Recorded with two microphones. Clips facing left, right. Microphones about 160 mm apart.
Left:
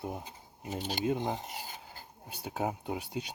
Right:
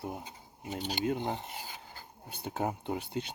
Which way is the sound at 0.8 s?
40° left (ahead or behind).